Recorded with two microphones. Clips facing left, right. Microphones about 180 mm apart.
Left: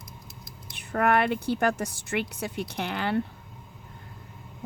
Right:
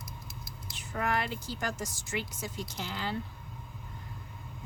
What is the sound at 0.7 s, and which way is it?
Speech, 60° left (ahead or behind).